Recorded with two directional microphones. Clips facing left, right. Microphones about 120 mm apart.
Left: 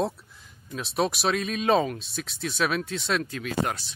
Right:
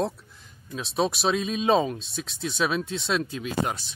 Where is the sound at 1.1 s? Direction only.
20° right (ahead or behind).